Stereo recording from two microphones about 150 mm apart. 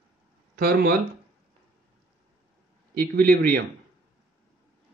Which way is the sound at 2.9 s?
75° right (ahead or behind).